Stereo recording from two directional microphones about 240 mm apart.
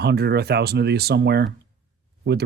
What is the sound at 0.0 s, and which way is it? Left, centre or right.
Speech, right.